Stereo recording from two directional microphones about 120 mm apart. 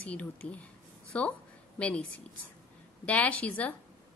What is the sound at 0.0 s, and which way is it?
A woman's voice, 10° left (ahead or behind).